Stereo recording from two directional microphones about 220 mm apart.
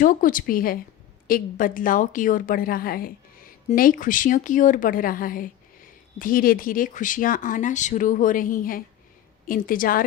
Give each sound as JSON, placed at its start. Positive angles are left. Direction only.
{"t": 0.0, "sound": "speech", "side_deg": 40}